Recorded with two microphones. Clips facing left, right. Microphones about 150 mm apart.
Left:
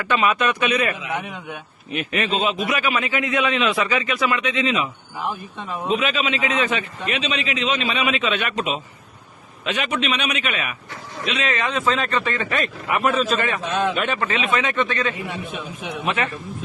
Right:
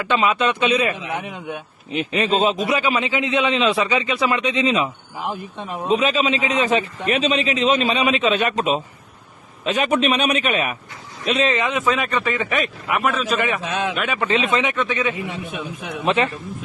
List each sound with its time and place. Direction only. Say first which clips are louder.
0.1 s a man's voice: right 1 dB; 25° right (ahead or behind)
2.2 s a man's voice: right 5 dB; 40° right (ahead or behind)
2.6 s a man's voice: right 2 dB; 25° right (ahead or behind)
5.1 s speech: right 1 dB; 15° right (ahead or behind)
5.9 s a man's voice: right 4 dB; 35° right (ahead or behind)
11.5 s a man's voice: right 2 dB; 20° right (ahead or behind)
12.9 s a man's voice: left 1 dB; centre (ahead or behind)
14.3 s a man's voice: right 3 dB; 25° right (ahead or behind)
15.8 s a man's voice: even; centre (ahead or behind)
16.0 s a man's voice: right 5 dB; 30° right (ahead or behind)